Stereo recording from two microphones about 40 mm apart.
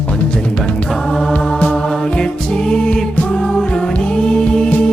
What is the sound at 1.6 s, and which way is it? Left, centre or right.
Music, left.